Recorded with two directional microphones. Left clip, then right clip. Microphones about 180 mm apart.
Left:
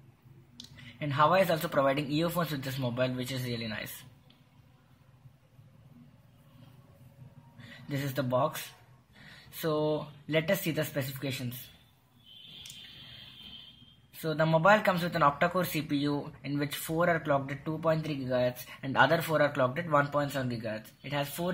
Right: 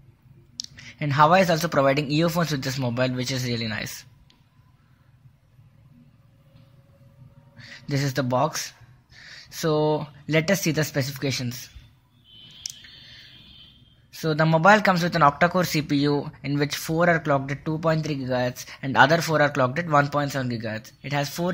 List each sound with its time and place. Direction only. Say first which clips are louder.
0.7 s speech: right 8 dB; 40° right (ahead or behind)
7.5 s speech: right 8 dB; 40° right (ahead or behind)
14.2 s speech: right 7 dB; 40° right (ahead or behind)